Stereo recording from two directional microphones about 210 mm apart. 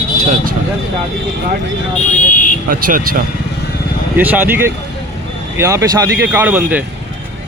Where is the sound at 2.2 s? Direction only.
40° left (ahead or behind).